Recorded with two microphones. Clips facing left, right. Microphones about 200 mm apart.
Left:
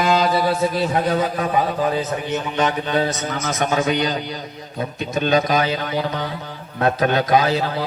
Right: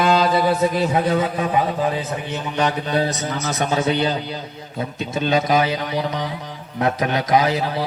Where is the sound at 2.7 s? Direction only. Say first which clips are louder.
Even; 35° right (ahead or behind).